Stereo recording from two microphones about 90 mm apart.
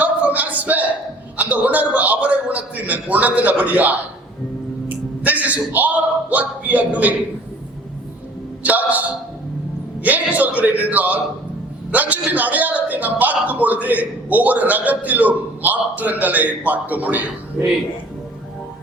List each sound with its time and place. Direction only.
0.0 s a sound: 20° right (ahead or behind)
1.4 s a man's voice: 15° right (ahead or behind)
5.2 s a man's voice: 15° right (ahead or behind)
8.6 s a man's voice: 15° right (ahead or behind)